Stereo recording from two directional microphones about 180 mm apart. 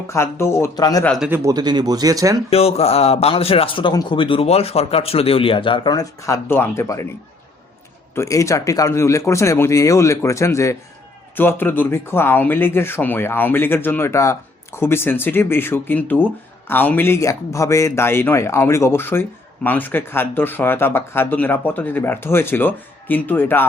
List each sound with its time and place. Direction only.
0.1 s speech: 15° left (ahead or behind)
1.0 s speech: 5° left (ahead or behind)
1.3 s speech: 15° right (ahead or behind)
2.5 s a man's voice: 35° left (ahead or behind); by 7.1 s 15° left (ahead or behind)
8.1 s speech: 15° left (ahead or behind)